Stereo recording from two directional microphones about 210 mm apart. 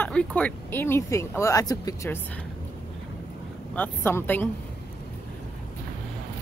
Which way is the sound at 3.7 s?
10° left (ahead or behind).